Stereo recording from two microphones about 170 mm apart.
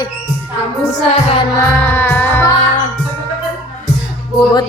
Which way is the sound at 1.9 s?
10° left (ahead or behind).